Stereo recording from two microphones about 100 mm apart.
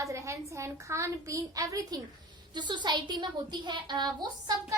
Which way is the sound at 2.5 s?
50° right (ahead or behind).